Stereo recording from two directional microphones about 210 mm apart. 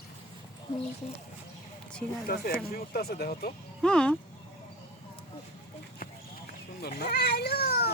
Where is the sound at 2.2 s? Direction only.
45° left (ahead or behind).